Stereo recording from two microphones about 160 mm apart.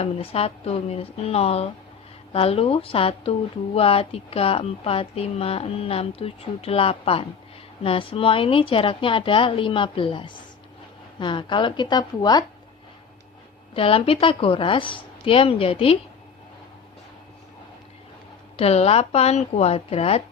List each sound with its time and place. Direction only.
0.0 s a woman's voice: 35° left (ahead or behind)
13.7 s speech: 35° left (ahead or behind)
18.5 s speech: 40° left (ahead or behind)